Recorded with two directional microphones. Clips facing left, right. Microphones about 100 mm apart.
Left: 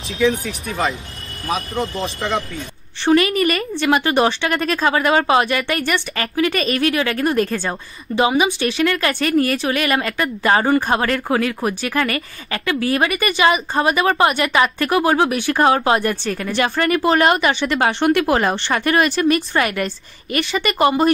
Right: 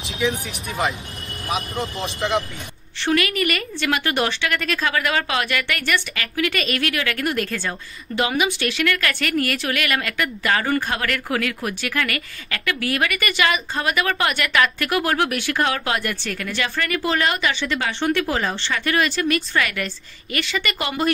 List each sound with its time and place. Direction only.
0.2 s speech: 15° right (ahead or behind)
3.1 s speech: 30° left (ahead or behind)